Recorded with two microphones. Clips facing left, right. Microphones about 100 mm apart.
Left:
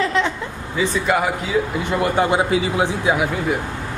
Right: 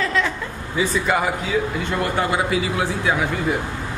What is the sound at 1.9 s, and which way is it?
A man's voice, 20° left (ahead or behind).